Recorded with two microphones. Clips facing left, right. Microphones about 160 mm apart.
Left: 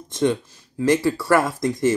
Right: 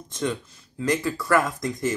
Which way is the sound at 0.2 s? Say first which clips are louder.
Left 7 dB; 25° left (ahead or behind).